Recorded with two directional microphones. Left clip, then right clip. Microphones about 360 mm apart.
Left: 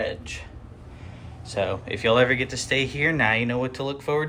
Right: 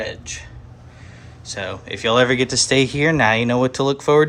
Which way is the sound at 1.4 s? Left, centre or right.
Centre.